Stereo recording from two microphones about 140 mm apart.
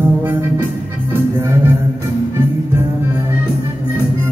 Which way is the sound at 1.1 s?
15° right (ahead or behind).